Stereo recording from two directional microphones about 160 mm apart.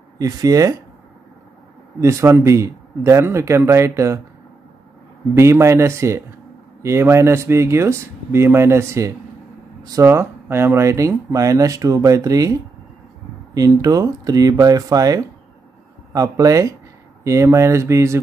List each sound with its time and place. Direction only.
0.2 s speech: 20° right (ahead or behind)
2.0 s speech: 20° right (ahead or behind)
5.3 s speech: 15° right (ahead or behind)
13.6 s speech: 20° right (ahead or behind)